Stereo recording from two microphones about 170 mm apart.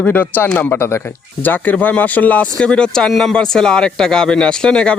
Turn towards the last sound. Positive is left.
turn(degrees=5)  # may be behind; listen again after turning